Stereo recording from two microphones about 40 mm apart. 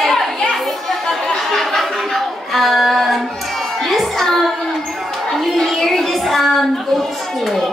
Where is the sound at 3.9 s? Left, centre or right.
Centre.